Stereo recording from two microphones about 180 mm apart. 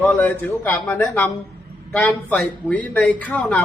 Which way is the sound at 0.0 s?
10° left (ahead or behind).